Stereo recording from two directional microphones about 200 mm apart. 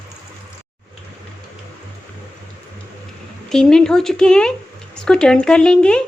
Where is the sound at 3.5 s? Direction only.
5° left (ahead or behind).